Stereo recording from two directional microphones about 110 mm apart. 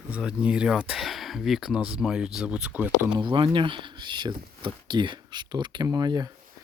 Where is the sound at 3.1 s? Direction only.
45° right (ahead or behind).